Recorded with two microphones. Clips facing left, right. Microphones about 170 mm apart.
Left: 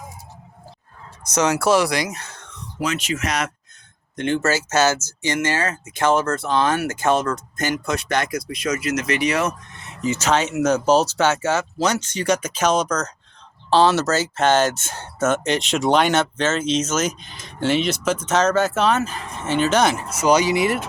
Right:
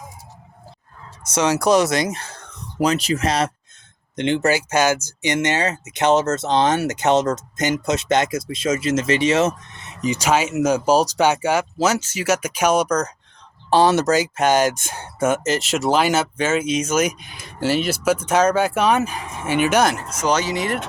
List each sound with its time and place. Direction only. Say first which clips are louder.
1.3 s speech: right 1 dB; 15° right (ahead or behind); by 3.5 s 30° right (ahead or behind)
4.1 s speech: right 2 dB; 20° right (ahead or behind)
19.8 s speech: left 1 dB; 5° left (ahead or behind)